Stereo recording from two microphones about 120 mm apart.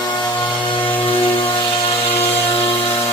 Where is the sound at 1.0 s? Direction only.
45° left (ahead or behind).